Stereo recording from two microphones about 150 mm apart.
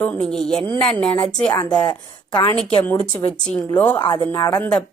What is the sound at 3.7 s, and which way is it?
Speech, 10° left (ahead or behind).